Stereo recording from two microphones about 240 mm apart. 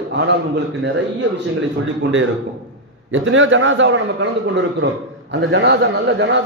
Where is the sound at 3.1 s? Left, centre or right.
Right.